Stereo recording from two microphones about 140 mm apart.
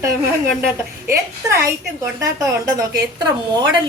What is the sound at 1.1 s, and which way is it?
Speech, 20° right (ahead or behind).